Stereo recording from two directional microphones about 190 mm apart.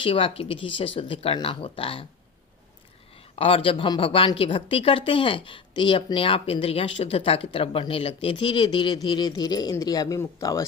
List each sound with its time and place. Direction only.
0.0 s a woman's voice: 30° left (ahead or behind)
3.3 s a woman's voice: 30° left (ahead or behind)